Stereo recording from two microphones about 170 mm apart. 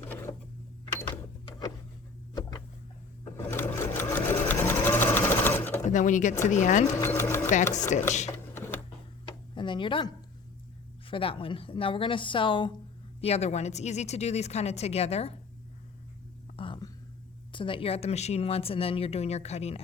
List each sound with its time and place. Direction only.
0.0 s a sound: 15° left (ahead or behind)
3.3 s sewing machine: 15° left (ahead or behind)
5.8 s speech: 45° left (ahead or behind)
6.9 s speech: 15° left (ahead or behind)
7.5 s speech: 45° left (ahead or behind)
8.3 s a sound: 15° left (ahead or behind)
9.6 s speech: 30° left (ahead or behind)
16.6 s a sound: 30° left (ahead or behind)
17.5 s speech: 30° left (ahead or behind)